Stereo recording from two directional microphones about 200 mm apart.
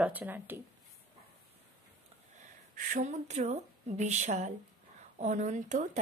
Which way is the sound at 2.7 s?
40° right (ahead or behind).